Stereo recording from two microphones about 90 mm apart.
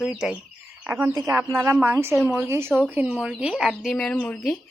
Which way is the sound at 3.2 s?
5° right (ahead or behind).